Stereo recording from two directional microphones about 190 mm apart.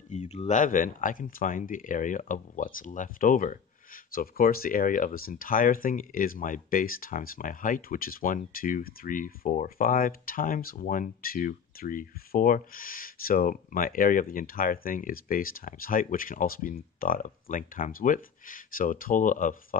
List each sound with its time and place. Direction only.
0.1 s speech: 35° left (ahead or behind)